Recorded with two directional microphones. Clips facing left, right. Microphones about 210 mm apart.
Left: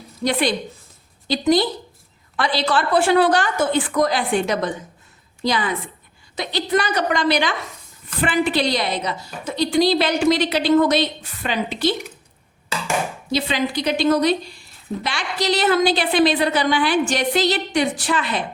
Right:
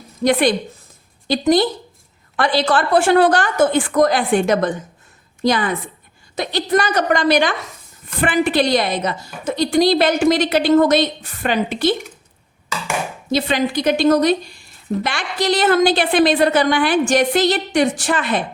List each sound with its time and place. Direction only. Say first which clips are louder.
0.3 s a woman's voice: right 5 dB; 55° right (ahead or behind)
13.3 s a woman's voice: right 4 dB; 50° right (ahead or behind)